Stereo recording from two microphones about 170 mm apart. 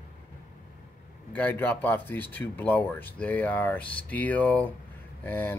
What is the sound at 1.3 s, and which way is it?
Speech, 10° left (ahead or behind).